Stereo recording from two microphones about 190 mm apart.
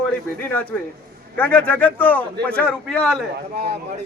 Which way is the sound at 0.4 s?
10° left (ahead or behind).